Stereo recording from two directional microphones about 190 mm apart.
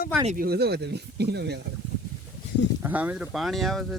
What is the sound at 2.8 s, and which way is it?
Speech, 10° right (ahead or behind).